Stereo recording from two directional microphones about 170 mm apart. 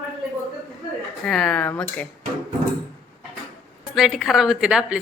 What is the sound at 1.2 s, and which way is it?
Speech, 5° left (ahead or behind).